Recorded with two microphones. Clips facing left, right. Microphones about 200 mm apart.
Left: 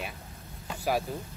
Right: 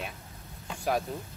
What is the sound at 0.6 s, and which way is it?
Vehicle, 5° left (ahead or behind).